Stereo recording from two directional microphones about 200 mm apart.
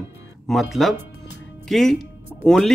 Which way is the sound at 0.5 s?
Centre (ahead or behind).